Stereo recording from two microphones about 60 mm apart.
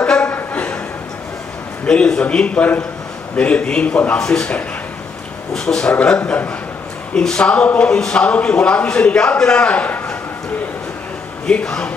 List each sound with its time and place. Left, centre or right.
0.0 s music: centre
1.9 s a man's voice: centre
11.4 s a man's voice: centre